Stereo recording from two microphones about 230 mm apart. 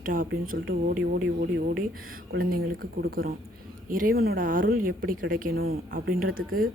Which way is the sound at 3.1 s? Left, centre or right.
Right.